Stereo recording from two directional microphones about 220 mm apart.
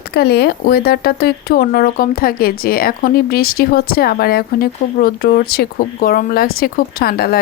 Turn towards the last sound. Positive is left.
turn(degrees=45)  # may be behind; listen again after turning